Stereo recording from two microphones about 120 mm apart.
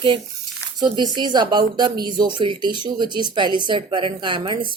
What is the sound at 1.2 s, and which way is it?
Speech, 35° right (ahead or behind).